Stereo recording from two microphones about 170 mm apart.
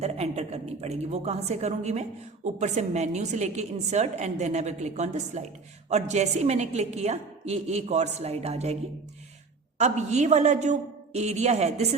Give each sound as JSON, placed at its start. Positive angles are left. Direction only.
{"t": 0.0, "sound": "a woman's voice", "side_deg": -40}